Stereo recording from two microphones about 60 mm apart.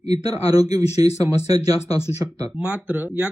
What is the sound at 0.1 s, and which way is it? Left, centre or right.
Speech, right.